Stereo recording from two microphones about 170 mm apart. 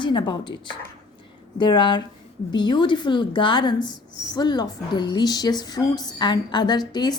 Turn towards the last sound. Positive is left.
turn(degrees=25)  # may be behind; listen again after turning